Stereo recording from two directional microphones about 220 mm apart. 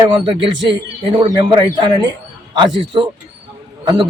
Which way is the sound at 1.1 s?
20° right (ahead or behind).